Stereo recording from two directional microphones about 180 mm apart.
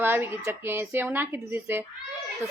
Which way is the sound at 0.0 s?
10° right (ahead or behind).